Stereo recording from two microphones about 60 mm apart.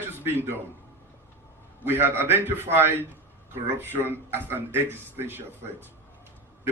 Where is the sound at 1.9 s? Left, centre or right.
Right.